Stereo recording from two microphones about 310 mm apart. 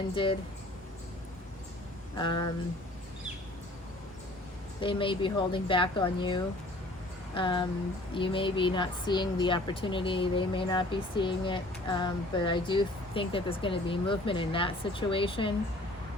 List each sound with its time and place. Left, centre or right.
0.1 s speech: centre
4.8 s speech: centre